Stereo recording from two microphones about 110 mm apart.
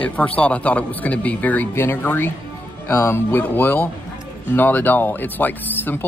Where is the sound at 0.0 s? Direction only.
15° left (ahead or behind).